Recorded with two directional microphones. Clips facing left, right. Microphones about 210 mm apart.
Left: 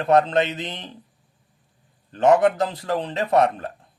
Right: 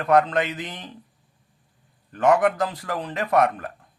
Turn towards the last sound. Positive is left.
turn(degrees=25)  # may be behind; listen again after turning